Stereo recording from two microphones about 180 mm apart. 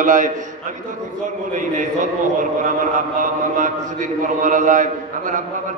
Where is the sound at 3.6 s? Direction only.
45° right (ahead or behind).